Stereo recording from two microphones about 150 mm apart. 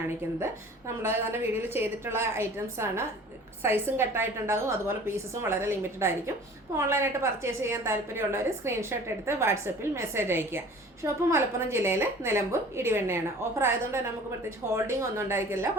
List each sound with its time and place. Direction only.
1.0 s a woman's voice: 15° right (ahead or behind)